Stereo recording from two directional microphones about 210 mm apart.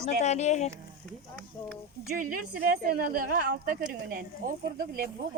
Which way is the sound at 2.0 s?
40° right (ahead or behind).